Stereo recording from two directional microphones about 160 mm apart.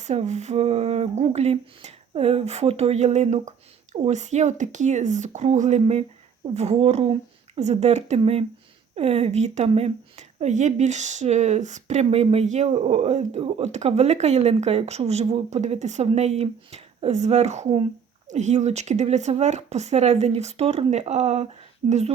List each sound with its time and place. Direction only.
0.0 s speech: 45° right (ahead or behind)